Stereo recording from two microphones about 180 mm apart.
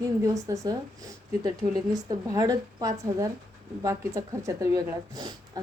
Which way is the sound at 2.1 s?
20° right (ahead or behind).